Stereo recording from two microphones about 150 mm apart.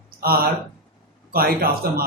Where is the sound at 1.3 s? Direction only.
85° right.